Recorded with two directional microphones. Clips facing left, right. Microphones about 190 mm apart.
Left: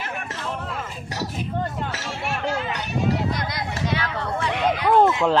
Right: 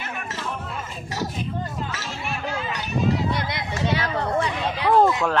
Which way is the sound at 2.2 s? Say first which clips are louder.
Left 4 dB; 75° left (ahead or behind).